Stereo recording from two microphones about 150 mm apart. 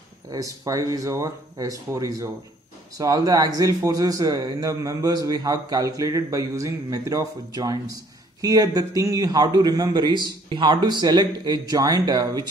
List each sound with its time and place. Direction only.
0.3 s a man's voice: 20° right (ahead or behind)